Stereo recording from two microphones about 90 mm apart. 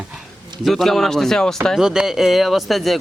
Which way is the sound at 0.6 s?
Centre (ahead or behind).